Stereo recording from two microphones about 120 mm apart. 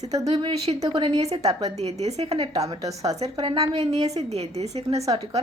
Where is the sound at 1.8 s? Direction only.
65° right (ahead or behind).